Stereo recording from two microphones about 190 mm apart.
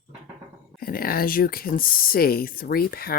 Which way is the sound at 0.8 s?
50° left (ahead or behind).